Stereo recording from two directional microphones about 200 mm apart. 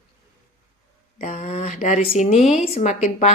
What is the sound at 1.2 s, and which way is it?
A woman's voice, 35° left (ahead or behind).